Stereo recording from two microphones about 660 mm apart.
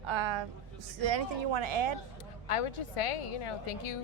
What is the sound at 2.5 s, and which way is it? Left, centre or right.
A woman's voice, left.